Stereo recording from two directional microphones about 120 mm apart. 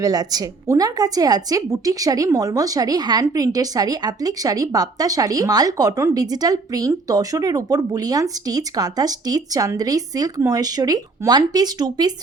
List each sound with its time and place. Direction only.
0.0 s a woman's voice: 30° right (ahead or behind)